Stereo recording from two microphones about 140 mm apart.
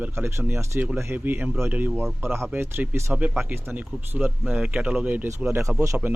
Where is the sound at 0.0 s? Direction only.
15° right (ahead or behind).